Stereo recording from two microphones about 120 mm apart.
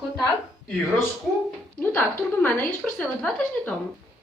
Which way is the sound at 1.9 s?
15° left (ahead or behind).